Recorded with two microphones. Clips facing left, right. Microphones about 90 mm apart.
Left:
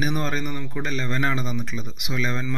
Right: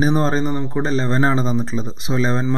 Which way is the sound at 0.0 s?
30° right (ahead or behind).